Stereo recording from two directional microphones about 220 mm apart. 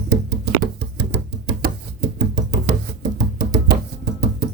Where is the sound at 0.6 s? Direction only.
50° right (ahead or behind).